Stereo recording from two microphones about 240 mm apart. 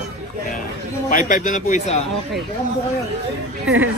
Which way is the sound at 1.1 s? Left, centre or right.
Left.